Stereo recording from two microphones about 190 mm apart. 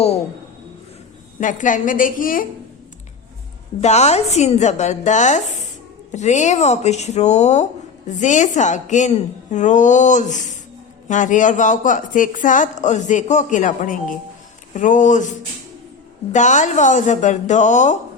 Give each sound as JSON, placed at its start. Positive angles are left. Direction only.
{"t": 1.4, "sound": "a woman's voice", "side_deg": 40}
{"t": 3.8, "sound": "speech", "side_deg": 35}